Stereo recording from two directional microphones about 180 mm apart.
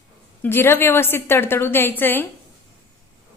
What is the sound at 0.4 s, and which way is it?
A woman's voice, 10° left (ahead or behind).